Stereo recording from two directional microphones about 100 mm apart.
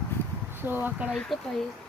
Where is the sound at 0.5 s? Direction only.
20° right (ahead or behind).